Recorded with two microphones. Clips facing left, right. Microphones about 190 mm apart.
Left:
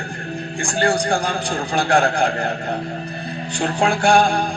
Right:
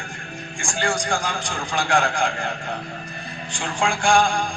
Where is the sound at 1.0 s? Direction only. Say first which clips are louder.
Left 5 dB; 35° left (ahead or behind).